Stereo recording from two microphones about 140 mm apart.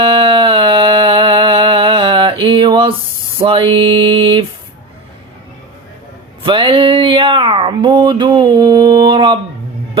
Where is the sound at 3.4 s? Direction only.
35° right (ahead or behind).